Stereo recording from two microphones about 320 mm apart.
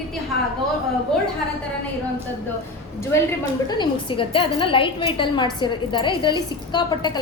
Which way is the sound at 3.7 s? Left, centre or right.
Centre.